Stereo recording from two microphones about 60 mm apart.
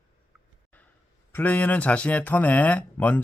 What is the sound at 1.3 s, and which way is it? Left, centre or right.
Speech, left.